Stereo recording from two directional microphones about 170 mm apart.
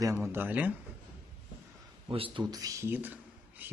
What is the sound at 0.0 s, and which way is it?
Speech, 15° right (ahead or behind).